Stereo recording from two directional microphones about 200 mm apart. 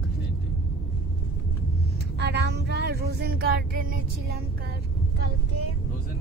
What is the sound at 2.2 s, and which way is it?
Speech, 55° right (ahead or behind).